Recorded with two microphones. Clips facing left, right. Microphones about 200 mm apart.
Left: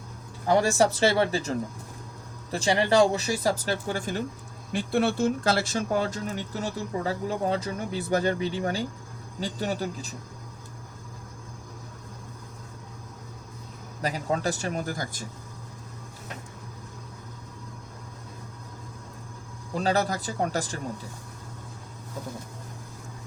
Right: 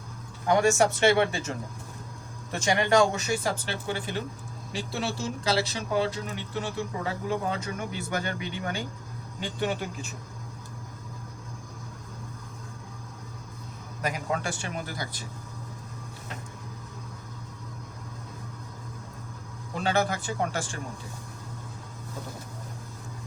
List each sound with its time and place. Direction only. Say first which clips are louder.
0.4 s speech: even; 30° left (ahead or behind)
4.7 s speech: left 7 dB; 55° left (ahead or behind); by 10.2 s 40° left (ahead or behind)
14.0 s speech: left 3 dB; 35° left (ahead or behind)
19.7 s speech: left 1 dB; 35° left (ahead or behind)